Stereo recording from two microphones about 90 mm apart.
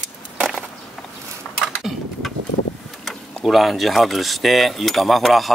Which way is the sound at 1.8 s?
Centre (ahead or behind).